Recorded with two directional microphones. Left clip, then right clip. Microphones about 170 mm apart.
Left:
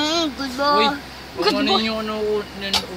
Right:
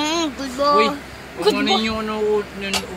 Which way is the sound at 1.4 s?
15° right (ahead or behind).